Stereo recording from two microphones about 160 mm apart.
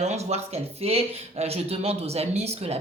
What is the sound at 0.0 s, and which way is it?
Speech, 40° right (ahead or behind).